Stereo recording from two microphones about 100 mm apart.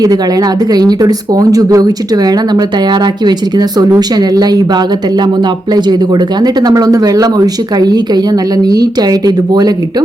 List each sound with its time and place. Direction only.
0.0 s speech: 40° right (ahead or behind)